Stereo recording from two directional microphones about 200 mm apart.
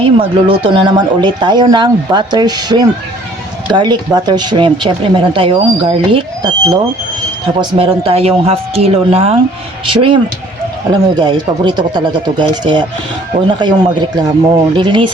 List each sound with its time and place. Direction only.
0.0 s speech: 25° right (ahead or behind)